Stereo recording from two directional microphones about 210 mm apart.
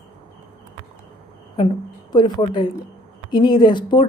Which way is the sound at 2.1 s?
20° left (ahead or behind).